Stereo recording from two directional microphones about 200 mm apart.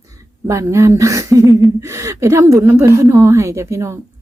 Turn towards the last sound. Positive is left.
turn(degrees=-15)  # may be behind; listen again after turning